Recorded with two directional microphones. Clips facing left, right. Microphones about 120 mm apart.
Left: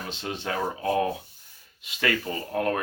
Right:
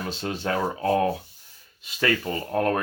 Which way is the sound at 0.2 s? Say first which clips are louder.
Right 3 dB; 40° right (ahead or behind).